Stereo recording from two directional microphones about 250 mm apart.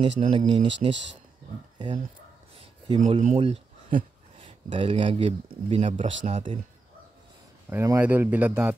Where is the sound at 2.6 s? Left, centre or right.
Right.